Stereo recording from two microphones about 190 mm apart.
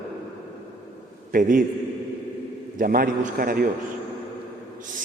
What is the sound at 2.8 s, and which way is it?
Speech, 45° right (ahead or behind).